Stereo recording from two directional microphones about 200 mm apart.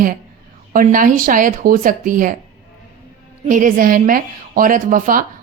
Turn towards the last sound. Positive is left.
turn(degrees=-45)  # may be behind; listen again after turning